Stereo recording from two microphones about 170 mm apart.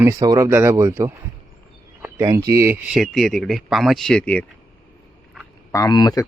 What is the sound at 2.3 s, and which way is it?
Speech, 20° right (ahead or behind).